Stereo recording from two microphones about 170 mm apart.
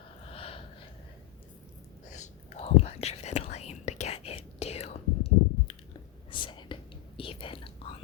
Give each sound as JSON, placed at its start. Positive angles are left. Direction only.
{"t": 0.3, "sound": "gasp", "side_deg": 35}
{"t": 2.0, "sound": "whispering", "side_deg": 45}